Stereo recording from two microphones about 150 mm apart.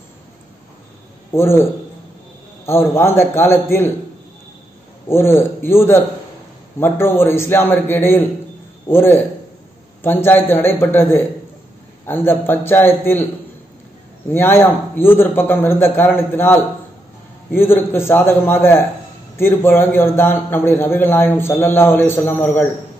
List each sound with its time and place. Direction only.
1.3 s a man's voice: 15° left (ahead or behind)
5.0 s a man's voice: 15° left (ahead or behind)
14.3 s a man's voice: 15° left (ahead or behind)